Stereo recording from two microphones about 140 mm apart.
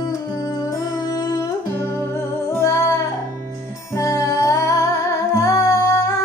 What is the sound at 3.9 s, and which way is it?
Music, 25° left (ahead or behind).